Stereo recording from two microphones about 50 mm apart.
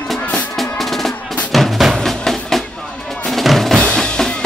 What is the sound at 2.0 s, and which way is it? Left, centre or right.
Music, centre.